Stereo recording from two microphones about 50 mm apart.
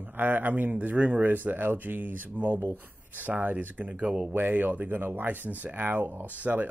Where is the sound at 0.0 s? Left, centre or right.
Right.